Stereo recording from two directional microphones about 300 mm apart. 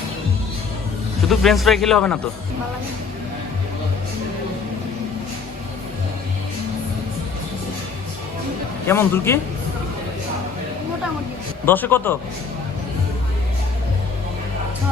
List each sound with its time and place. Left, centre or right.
1.3 s a man's voice: centre
8.9 s a man's voice: centre
11.6 s a man's voice: centre